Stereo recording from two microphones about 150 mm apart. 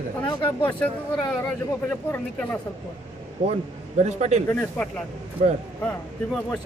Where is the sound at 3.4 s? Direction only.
50° right (ahead or behind).